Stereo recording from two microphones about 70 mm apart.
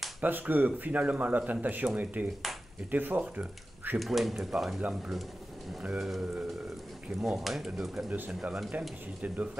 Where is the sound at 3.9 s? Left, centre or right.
Centre.